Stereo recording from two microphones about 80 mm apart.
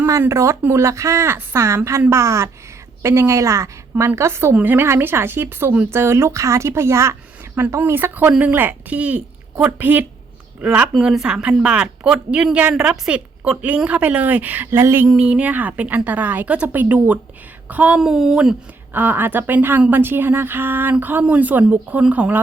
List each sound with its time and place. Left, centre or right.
0.2 s a woman's voice: right
15.0 s a woman's voice: centre
18.0 s speech: centre
18.9 s a woman's voice: right